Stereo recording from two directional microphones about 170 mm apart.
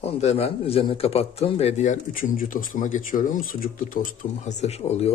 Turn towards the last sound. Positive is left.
turn(degrees=40)  # may be behind; listen again after turning